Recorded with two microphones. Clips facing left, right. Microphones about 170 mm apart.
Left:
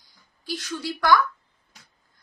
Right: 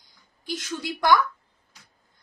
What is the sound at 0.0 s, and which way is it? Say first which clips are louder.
Speech: even; 20° right (ahead or behind).